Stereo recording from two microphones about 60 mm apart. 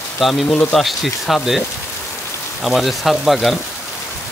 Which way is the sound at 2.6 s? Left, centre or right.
Centre.